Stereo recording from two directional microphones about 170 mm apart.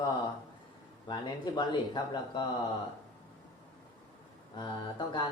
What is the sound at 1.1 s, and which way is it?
Speech, 30° left (ahead or behind).